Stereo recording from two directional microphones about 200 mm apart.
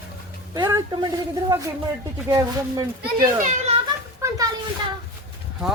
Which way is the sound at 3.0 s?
40° right (ahead or behind).